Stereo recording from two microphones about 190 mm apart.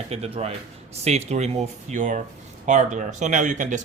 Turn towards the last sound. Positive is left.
turn(degrees=-40)  # may be behind; listen again after turning